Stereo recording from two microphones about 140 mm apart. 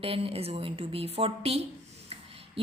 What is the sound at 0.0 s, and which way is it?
A woman's voice, 40° right (ahead or behind).